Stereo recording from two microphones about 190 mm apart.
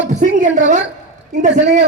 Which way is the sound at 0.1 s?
40° right (ahead or behind).